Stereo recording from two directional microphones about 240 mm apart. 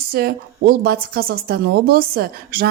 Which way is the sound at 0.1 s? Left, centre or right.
Right.